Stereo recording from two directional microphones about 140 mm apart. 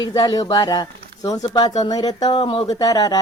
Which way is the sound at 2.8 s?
25° left (ahead or behind).